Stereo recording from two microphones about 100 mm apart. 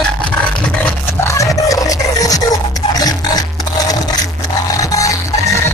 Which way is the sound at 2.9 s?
40° left (ahead or behind).